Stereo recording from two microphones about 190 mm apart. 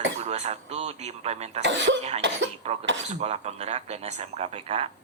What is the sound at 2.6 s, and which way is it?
Speech, 35° right (ahead or behind).